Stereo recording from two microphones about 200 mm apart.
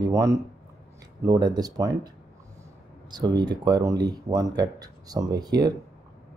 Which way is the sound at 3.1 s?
20° right (ahead or behind).